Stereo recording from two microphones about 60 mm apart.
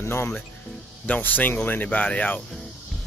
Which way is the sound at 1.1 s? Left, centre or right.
Left.